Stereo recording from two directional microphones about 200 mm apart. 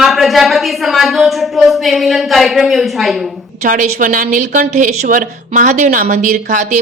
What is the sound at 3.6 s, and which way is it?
A woman's voice, 40° right (ahead or behind).